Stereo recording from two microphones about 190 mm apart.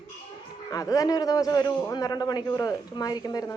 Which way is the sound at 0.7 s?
20° left (ahead or behind).